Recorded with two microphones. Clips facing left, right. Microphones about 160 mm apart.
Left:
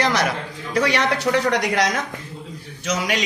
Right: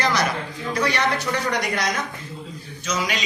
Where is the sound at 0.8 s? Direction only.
75° left (ahead or behind).